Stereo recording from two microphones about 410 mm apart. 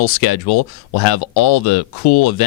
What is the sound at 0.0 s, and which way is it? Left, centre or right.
Speech, left.